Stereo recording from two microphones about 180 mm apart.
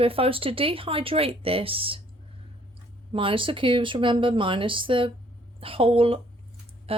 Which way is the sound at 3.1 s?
30° right (ahead or behind).